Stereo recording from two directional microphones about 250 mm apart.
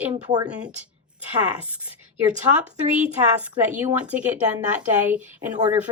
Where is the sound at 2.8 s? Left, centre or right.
Right.